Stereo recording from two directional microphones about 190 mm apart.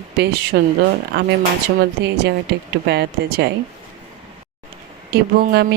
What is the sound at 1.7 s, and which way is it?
Speech, 55° right (ahead or behind).